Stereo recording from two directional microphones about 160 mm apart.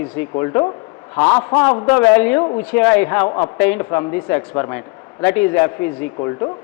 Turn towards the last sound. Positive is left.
turn(degrees=25)  # may be behind; listen again after turning